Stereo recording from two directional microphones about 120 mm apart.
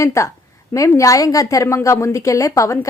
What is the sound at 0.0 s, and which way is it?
A woman's voice, 25° left (ahead or behind).